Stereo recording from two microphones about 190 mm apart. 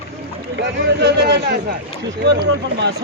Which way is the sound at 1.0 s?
65° right (ahead or behind).